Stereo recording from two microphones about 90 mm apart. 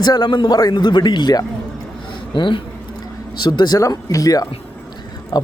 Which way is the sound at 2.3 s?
65° left (ahead or behind).